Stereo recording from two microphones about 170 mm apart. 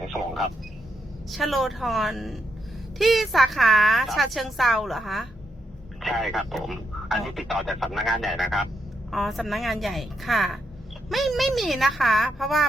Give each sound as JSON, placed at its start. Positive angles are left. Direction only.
{"t": 1.3, "sound": "speech", "side_deg": 0}